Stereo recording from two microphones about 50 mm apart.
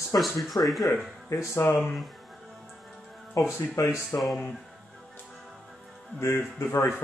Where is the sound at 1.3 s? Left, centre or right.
Left.